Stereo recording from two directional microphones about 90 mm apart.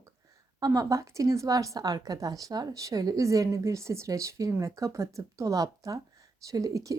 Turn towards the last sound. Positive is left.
turn(degrees=-40)  # may be behind; listen again after turning